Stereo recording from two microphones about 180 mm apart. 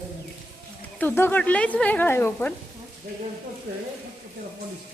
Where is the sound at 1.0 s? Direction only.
10° left (ahead or behind).